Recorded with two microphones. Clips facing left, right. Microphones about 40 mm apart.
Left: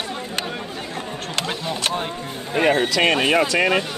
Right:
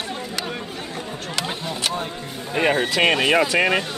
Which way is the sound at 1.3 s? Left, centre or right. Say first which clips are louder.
Left 2 dB; left.